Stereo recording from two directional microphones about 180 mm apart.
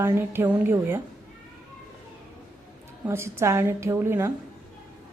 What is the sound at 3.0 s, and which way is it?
A woman's voice, 15° right (ahead or behind).